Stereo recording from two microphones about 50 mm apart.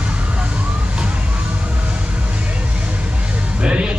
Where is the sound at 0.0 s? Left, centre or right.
Right.